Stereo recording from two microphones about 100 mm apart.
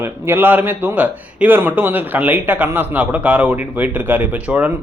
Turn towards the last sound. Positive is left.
turn(degrees=-15)  # may be behind; listen again after turning